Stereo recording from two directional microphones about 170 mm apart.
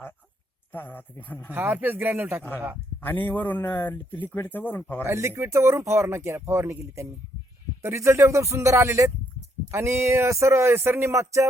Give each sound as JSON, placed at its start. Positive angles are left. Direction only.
{"t": 0.7, "sound": "speech", "side_deg": 10}
{"t": 1.5, "sound": "speech", "side_deg": -10}
{"t": 3.0, "sound": "speech", "side_deg": 10}
{"t": 5.0, "sound": "speech", "side_deg": -15}